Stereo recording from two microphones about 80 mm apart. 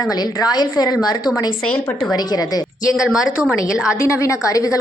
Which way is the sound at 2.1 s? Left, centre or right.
Left.